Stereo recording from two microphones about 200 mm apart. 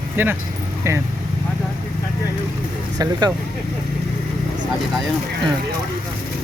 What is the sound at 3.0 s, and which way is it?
Speech, 20° right (ahead or behind).